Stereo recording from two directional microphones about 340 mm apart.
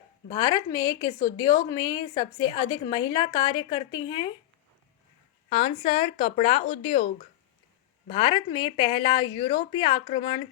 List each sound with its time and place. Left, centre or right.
0.3 s speech: centre
5.5 s speech: centre